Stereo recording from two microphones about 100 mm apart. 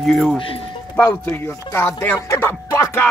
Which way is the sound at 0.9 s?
15° left (ahead or behind).